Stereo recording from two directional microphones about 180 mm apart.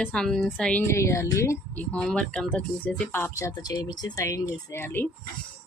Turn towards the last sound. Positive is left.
turn(degrees=10)  # may be behind; listen again after turning